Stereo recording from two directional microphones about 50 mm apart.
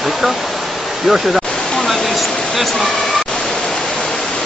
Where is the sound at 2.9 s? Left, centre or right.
Centre.